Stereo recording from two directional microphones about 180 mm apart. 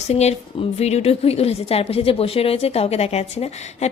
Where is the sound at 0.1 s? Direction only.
35° left (ahead or behind).